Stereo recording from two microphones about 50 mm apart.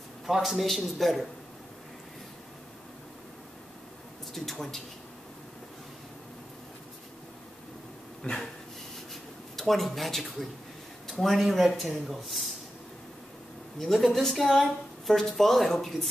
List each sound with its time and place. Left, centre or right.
0.3 s a woman's voice: centre
4.3 s a woman's voice: centre
8.2 s dog: centre
9.1 s writing: centre
11.1 s a woman's voice: centre
13.7 s a woman's voice: centre